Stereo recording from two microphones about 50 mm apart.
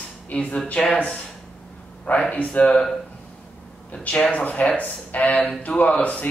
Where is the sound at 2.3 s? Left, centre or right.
Left.